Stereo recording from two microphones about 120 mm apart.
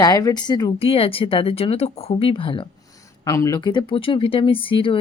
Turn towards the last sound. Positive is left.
turn(degrees=45)  # may be behind; listen again after turning